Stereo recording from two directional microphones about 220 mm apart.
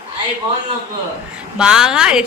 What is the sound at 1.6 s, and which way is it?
Speech, 5° right (ahead or behind).